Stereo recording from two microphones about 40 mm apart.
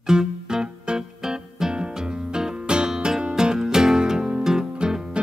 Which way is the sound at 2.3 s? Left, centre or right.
Right.